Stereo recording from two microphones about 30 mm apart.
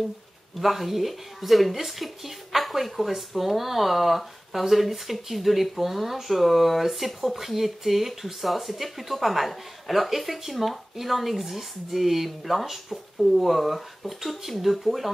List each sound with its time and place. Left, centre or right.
0.6 s speech: centre